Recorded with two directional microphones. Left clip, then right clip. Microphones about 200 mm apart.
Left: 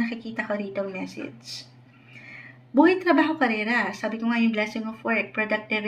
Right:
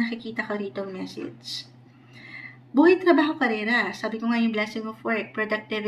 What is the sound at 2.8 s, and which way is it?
A woman's voice, 25° left (ahead or behind).